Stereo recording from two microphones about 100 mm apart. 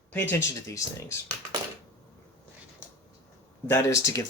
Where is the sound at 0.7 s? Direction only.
30° left (ahead or behind).